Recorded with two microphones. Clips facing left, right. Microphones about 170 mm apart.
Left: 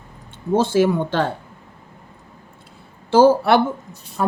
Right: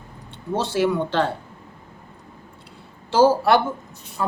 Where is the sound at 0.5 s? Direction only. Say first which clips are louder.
Left 5 dB; 50° left (ahead or behind).